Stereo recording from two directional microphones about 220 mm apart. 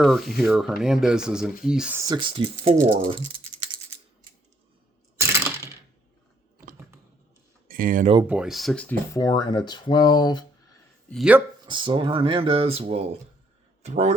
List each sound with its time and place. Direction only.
0.0 s speech: centre (ahead or behind); by 3.2 s 25° right (ahead or behind)
5.1 s coin: 10° right (ahead or behind)
7.7 s speech: 40° right (ahead or behind)
8.3 s speech: 5° right (ahead or behind)
9.1 s speech: 15° left (ahead or behind)
11.1 s speech: 5° right (ahead or behind)
11.6 s speech: 20° right (ahead or behind)